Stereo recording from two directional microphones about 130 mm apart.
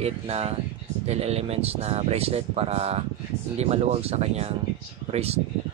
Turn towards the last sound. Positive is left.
turn(degrees=-50)  # may be behind; listen again after turning